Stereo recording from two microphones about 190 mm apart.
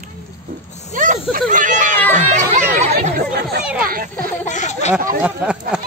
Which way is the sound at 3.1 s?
55° right (ahead or behind).